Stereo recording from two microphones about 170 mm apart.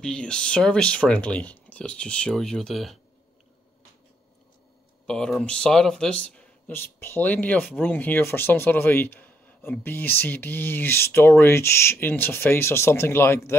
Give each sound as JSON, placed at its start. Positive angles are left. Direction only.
{"t": 0.0, "sound": "speech", "side_deg": 5}
{"t": 5.0, "sound": "speech", "side_deg": 5}